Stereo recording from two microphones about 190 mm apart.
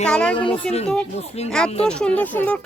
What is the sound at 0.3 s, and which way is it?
Speech, 30° left (ahead or behind).